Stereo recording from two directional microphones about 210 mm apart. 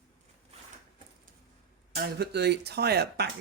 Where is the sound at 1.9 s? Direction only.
50° right (ahead or behind).